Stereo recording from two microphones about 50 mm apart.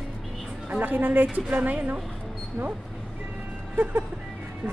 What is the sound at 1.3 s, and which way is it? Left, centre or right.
Speech, right.